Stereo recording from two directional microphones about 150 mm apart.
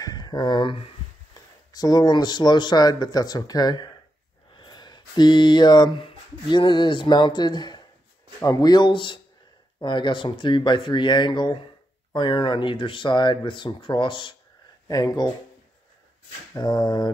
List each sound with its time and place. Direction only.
0.0 s speech: 25° left (ahead or behind)
16.5 s speech: 30° left (ahead or behind)